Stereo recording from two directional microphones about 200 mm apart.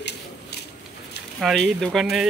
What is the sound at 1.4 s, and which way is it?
Speech, centre (ahead or behind).